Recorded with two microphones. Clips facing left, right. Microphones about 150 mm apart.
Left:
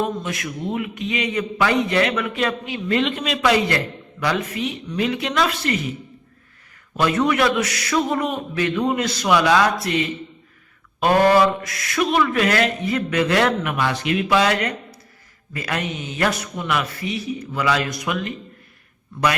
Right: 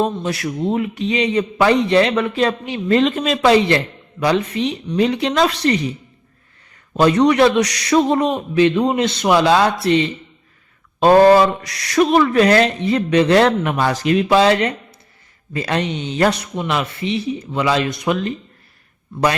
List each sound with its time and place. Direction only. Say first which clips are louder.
0.0 s a man's voice: right 5 dB; 30° right (ahead or behind)
6.9 s a man's voice: right 6 dB; 30° right (ahead or behind)
7.6 s a sound: right 5 dB; 25° left (ahead or behind)
7.9 s a man's voice: right 6 dB; 25° right (ahead or behind)
14.3 s a man's voice: right 4 dB; 30° right (ahead or behind)